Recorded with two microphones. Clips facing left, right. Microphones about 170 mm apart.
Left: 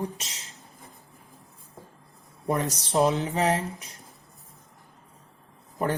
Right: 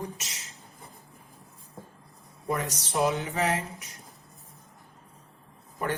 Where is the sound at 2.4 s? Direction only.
35° left (ahead or behind).